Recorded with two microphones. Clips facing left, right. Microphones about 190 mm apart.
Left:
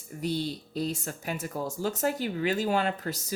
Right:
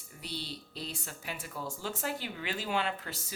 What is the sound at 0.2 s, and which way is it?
Speech, 45° left (ahead or behind).